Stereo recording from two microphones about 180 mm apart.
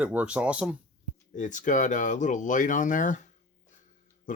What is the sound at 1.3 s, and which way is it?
Speech, 45° left (ahead or behind).